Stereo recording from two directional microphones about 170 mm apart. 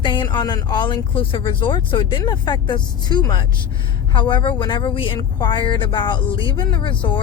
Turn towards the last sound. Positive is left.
turn(degrees=25)  # may be behind; listen again after turning